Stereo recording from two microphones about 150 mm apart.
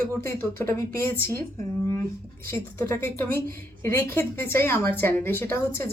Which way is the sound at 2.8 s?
15° left (ahead or behind).